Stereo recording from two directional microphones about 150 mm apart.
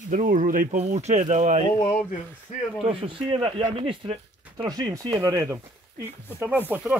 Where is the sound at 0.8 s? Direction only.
50° right (ahead or behind).